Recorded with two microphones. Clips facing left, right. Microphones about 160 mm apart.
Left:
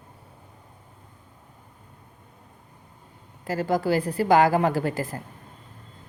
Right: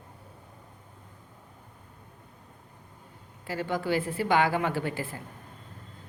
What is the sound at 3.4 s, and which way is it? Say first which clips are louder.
A woman's voice: left 6 dB; 40° left (ahead or behind).